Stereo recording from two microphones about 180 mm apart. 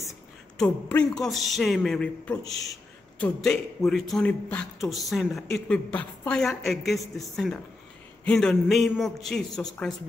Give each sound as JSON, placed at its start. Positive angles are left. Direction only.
{"t": 0.6, "sound": "a man's voice", "side_deg": 5}